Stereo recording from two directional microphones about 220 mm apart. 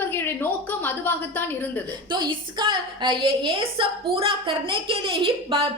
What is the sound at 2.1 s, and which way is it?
A woman's voice, 20° right (ahead or behind).